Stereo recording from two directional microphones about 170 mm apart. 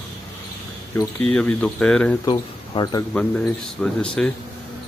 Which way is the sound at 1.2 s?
5° left (ahead or behind).